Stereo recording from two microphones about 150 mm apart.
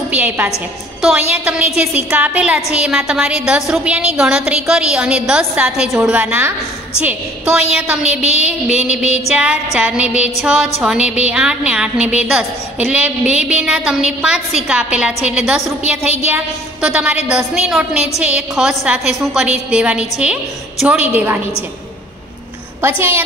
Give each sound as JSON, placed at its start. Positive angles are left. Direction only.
{"t": 0.1, "sound": "a woman's voice", "side_deg": -10}
{"t": 8.0, "sound": "a woman's voice", "side_deg": 45}
{"t": 8.4, "sound": "a woman's voice", "side_deg": -5}
{"t": 18.2, "sound": "a woman's voice", "side_deg": -5}
{"t": 22.8, "sound": "a woman's voice", "side_deg": -15}